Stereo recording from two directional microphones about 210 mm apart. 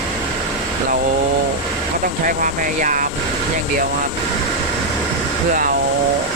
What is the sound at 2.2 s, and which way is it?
Speech, 40° right (ahead or behind).